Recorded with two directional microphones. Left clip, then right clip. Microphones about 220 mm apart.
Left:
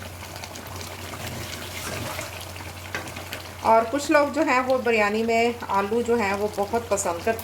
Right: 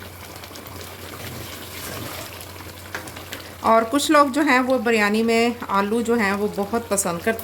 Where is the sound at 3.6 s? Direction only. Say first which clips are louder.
Right 2 dB; 50° right (ahead or behind).